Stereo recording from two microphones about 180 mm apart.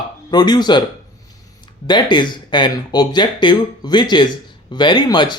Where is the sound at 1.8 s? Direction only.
25° left (ahead or behind).